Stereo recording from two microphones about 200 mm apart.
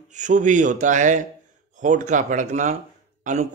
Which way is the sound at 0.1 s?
40° right (ahead or behind).